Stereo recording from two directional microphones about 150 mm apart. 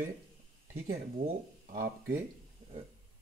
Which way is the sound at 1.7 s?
75° right (ahead or behind).